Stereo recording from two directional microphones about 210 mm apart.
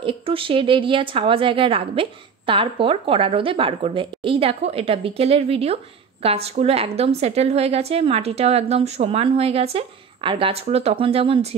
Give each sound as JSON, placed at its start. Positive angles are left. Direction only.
{"t": 0.0, "sound": "speech", "side_deg": -25}